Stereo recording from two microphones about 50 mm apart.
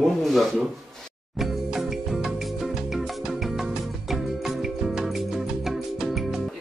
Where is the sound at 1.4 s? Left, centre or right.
Centre.